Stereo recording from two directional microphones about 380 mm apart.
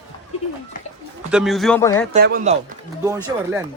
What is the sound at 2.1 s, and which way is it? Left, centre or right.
Speech, right.